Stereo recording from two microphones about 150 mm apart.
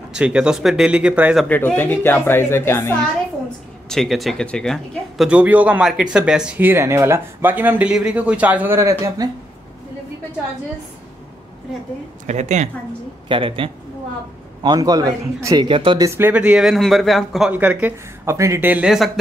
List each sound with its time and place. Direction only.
0.1 s speech: 5° right (ahead or behind)
1.5 s speech: 15° left (ahead or behind)
3.9 s speech: centre (ahead or behind); by 9.3 s 20° right (ahead or behind)
12.3 s a woman's voice: 50° right (ahead or behind)
13.3 s a man's voice: 35° right (ahead or behind)
16.1 s speech: 15° right (ahead or behind)
17.5 s speech: 10° right (ahead or behind)